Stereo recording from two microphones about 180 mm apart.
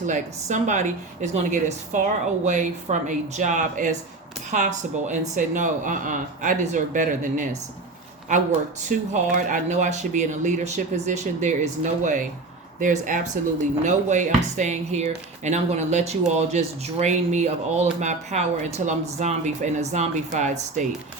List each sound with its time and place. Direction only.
0.0 s a woman's voice: 40° right (ahead or behind)
8.8 s a woman's voice: 45° right (ahead or behind)